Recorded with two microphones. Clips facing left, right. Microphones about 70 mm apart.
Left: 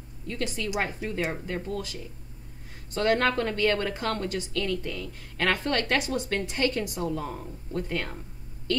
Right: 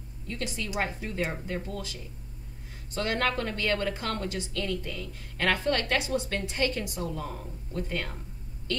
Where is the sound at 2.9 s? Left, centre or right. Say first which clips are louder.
Left 5 dB; left.